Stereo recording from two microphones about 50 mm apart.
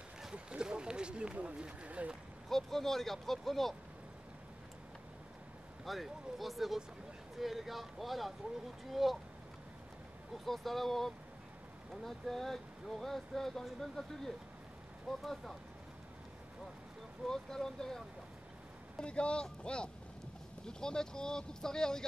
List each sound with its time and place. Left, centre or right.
0.3 s speech: centre
2.5 s speech: centre
5.9 s speech: centre
10.3 s speech: centre
17.3 s speech: centre
18.9 s speech: left